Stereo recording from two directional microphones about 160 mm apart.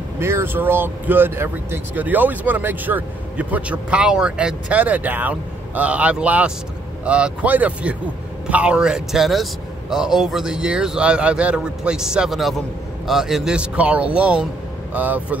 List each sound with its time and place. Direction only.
0.2 s speech: 15° right (ahead or behind)